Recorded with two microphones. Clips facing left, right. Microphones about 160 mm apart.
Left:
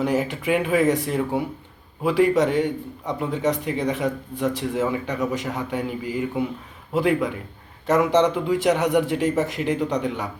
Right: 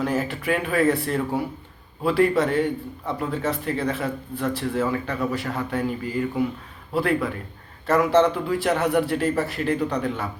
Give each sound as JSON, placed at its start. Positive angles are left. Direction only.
{"t": 0.0, "sound": "a man's voice", "side_deg": 20}